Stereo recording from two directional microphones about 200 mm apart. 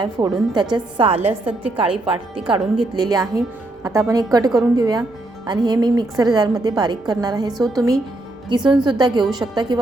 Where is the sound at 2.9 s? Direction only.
20° right (ahead or behind).